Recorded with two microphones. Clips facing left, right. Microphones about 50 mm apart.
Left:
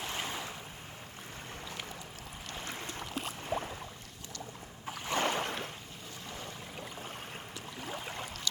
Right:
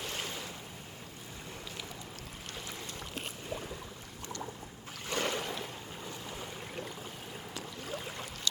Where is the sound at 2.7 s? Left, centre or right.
Left.